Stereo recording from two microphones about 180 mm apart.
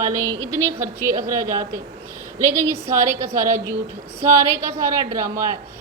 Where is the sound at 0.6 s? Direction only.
15° right (ahead or behind).